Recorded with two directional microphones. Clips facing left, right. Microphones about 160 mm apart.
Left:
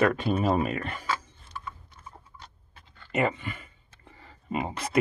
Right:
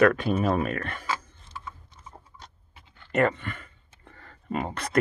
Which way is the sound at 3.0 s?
5° left (ahead or behind).